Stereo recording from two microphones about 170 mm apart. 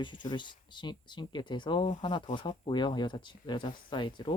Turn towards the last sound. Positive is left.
turn(degrees=30)  # may be behind; listen again after turning